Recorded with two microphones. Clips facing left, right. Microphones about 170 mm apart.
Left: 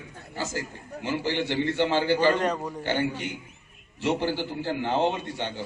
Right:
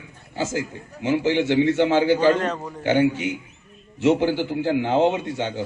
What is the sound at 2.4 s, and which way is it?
Speech, 10° left (ahead or behind).